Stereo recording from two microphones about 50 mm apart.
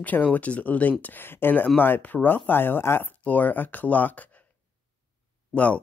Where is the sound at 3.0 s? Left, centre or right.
Left.